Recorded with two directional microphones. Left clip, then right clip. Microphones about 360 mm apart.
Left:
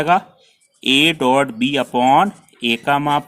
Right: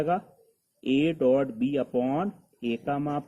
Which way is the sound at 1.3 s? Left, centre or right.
Left.